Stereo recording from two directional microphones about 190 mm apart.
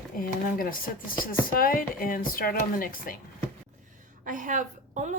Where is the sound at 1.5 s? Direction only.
50° left (ahead or behind).